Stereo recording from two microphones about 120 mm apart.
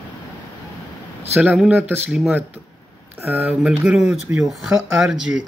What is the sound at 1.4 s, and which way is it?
Speech, 10° right (ahead or behind).